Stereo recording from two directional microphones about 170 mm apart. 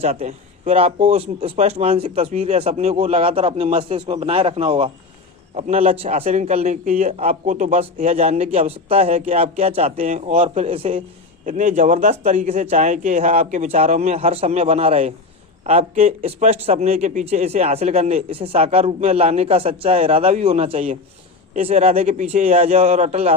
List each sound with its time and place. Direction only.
0.0 s a man's voice: 40° right (ahead or behind)
11.4 s a man's voice: 45° right (ahead or behind)